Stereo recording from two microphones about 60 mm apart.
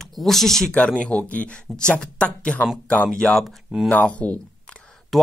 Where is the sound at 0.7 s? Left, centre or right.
Centre.